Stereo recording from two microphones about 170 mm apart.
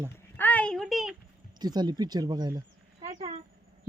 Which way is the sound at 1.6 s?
25° right (ahead or behind).